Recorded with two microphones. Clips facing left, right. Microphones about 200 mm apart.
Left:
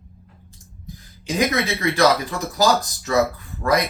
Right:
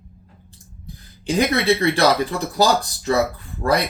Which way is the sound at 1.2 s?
30° right (ahead or behind).